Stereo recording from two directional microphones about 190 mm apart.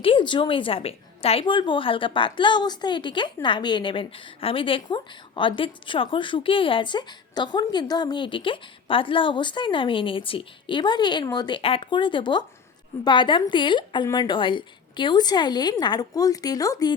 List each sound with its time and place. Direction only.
0.0 s a woman's voice: 25° left (ahead or behind)